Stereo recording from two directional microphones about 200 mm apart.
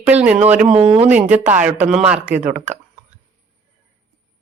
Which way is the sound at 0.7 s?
30° right (ahead or behind).